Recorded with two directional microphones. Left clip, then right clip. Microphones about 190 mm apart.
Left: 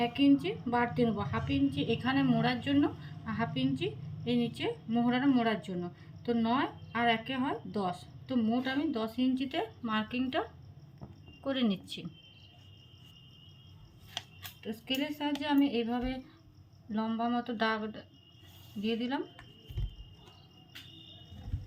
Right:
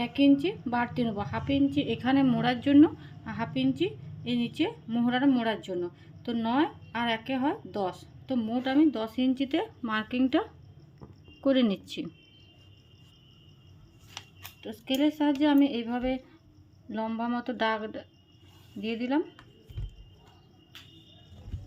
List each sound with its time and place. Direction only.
0.0 s speech: 55° right (ahead or behind)
14.6 s speech: 50° right (ahead or behind)